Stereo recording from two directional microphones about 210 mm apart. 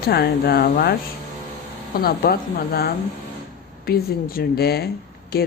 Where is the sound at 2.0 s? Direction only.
50° left (ahead or behind).